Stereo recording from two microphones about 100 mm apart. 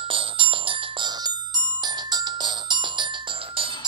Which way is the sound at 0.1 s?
60° right (ahead or behind).